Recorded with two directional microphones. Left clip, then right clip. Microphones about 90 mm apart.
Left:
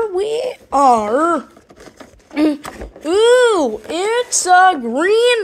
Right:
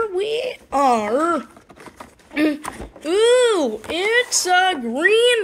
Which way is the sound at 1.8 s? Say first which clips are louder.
Even; 5° left (ahead or behind).